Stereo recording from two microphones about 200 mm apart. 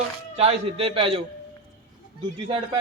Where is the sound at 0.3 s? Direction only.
30° right (ahead or behind).